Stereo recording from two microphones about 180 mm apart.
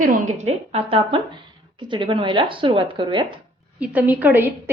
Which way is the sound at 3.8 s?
10° right (ahead or behind).